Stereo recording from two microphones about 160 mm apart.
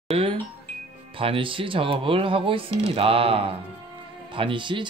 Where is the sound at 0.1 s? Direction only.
40° right (ahead or behind).